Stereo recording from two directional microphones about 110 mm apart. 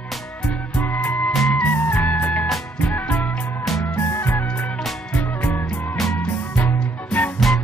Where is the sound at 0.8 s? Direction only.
20° left (ahead or behind).